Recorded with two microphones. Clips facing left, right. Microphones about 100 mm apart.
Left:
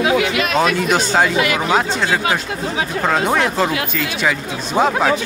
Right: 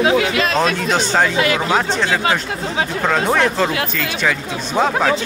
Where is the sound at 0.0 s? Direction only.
30° right (ahead or behind).